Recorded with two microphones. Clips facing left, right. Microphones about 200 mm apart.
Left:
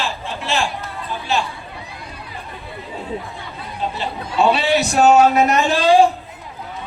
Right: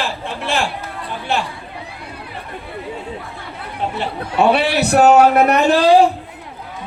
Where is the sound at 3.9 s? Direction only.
60° right (ahead or behind).